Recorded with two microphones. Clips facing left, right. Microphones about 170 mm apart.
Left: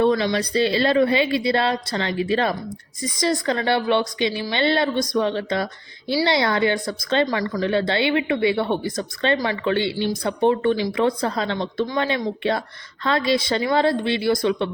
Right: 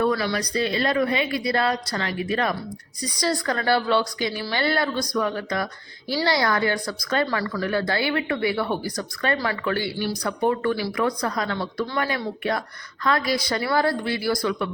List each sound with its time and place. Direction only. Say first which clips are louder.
0.0 s a woman's voice: left 4 dB; 25° left (ahead or behind)